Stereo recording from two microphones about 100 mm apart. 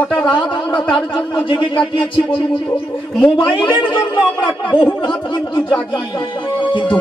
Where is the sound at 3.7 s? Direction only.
55° left (ahead or behind).